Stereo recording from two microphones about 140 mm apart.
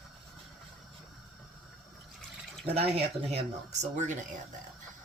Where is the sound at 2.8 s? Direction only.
45° right (ahead or behind).